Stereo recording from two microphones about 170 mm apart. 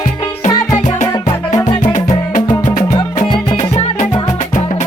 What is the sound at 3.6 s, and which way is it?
Music, 40° left (ahead or behind).